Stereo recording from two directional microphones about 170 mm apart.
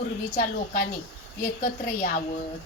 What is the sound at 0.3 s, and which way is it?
Speech, 55° left (ahead or behind).